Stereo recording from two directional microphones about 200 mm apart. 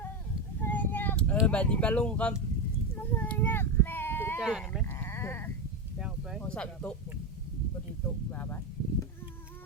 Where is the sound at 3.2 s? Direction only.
10° left (ahead or behind).